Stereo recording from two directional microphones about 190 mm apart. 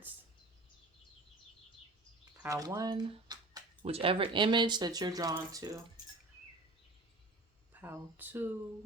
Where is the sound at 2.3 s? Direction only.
15° right (ahead or behind).